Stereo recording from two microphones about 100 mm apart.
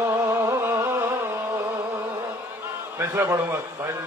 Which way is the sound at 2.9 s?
30° right (ahead or behind).